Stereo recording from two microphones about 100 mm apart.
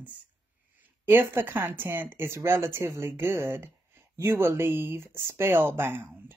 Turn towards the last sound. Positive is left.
turn(degrees=-20)  # may be behind; listen again after turning